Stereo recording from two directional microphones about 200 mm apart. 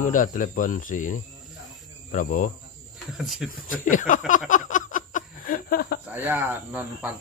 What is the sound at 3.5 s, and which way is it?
Speech, 40° left (ahead or behind).